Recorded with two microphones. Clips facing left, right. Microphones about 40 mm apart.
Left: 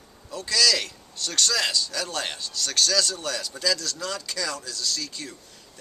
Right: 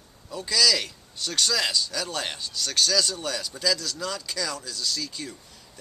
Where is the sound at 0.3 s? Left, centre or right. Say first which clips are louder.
Even; centre.